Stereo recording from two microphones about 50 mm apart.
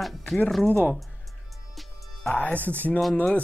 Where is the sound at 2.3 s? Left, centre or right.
Left.